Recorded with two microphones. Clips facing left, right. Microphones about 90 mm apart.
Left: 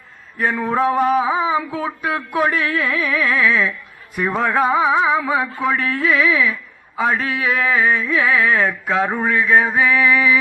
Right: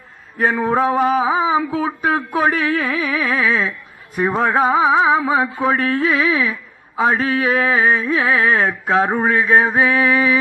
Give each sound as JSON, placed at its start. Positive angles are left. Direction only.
{"t": 0.4, "sound": "music", "side_deg": -20}
{"t": 0.9, "sound": "a sound", "side_deg": -15}
{"t": 2.1, "sound": "music", "side_deg": -25}
{"t": 5.7, "sound": "carnatic music", "side_deg": -35}
{"t": 6.0, "sound": "music", "side_deg": -25}
{"t": 6.5, "sound": "a sound", "side_deg": -25}
{"t": 7.9, "sound": "carnatic music", "side_deg": -25}
{"t": 9.0, "sound": "music", "side_deg": -20}
{"t": 9.3, "sound": "carnatic music", "side_deg": -30}